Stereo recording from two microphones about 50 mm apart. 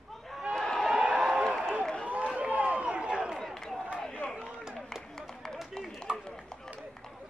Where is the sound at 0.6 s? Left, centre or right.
Centre.